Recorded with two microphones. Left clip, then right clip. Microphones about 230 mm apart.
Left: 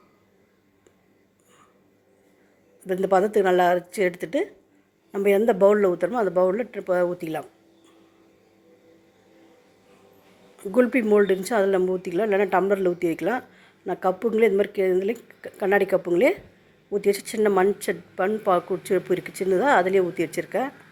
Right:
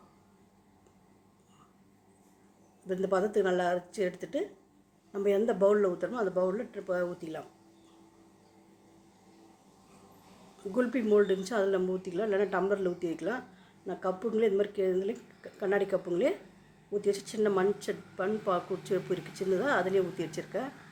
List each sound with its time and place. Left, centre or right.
2.8 s speech: left
10.6 s speech: left